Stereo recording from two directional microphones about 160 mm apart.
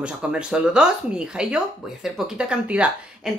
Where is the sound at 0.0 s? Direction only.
5° right (ahead or behind).